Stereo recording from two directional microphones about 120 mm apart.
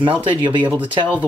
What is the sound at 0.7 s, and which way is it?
Speech, 15° right (ahead or behind).